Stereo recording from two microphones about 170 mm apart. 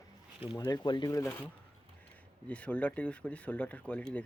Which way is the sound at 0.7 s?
25° left (ahead or behind).